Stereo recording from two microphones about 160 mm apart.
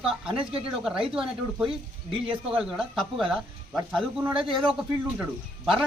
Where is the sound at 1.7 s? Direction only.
35° right (ahead or behind).